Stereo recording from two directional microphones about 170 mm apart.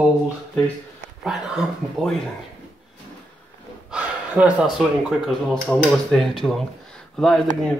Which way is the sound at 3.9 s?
10° right (ahead or behind).